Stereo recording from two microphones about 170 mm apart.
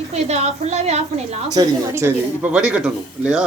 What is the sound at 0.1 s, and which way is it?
A woman's voice, 40° right (ahead or behind).